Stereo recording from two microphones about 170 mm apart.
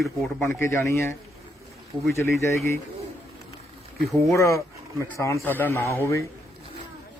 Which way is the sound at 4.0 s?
Centre (ahead or behind).